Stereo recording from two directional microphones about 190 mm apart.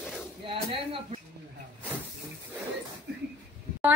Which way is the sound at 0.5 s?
25° right (ahead or behind).